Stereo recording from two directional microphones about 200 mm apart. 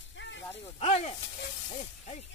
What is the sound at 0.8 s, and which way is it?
Snake, 30° left (ahead or behind).